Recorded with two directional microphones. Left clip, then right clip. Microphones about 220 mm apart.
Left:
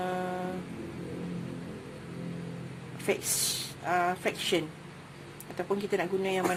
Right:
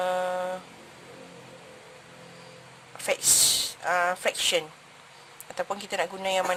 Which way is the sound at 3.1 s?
30° right (ahead or behind).